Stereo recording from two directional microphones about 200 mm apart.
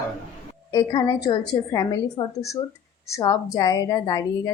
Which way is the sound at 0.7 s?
20° left (ahead or behind).